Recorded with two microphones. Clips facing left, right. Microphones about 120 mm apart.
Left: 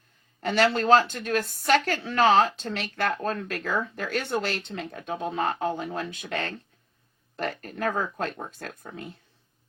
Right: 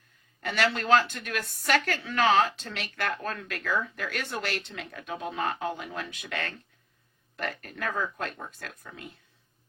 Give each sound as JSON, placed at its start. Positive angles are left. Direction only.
{"t": 0.4, "sound": "speech", "side_deg": 35}